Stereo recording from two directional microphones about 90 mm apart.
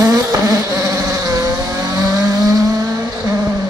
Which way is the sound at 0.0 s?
40° right (ahead or behind).